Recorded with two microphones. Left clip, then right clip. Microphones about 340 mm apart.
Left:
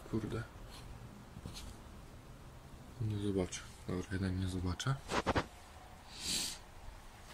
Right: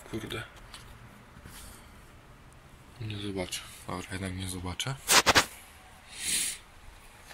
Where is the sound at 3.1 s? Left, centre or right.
Right.